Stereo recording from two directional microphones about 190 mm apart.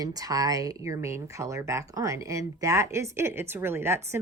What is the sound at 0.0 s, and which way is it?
Speech, 20° right (ahead or behind).